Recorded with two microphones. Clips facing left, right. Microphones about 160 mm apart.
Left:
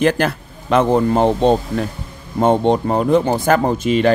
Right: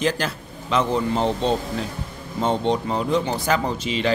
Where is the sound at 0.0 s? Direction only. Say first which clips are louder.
Left 7 dB; 55° left (ahead or behind).